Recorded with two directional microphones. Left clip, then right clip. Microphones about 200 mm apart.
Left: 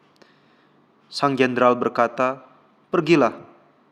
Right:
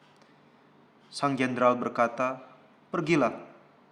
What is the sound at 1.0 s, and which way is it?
A man's voice, 35° left (ahead or behind).